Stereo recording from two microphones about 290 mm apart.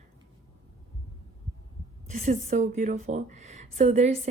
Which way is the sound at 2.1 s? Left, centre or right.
Right.